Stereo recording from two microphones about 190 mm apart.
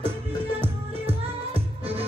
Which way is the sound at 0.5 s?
30° right (ahead or behind).